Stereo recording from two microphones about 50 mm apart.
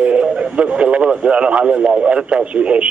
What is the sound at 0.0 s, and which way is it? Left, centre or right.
Speech, right.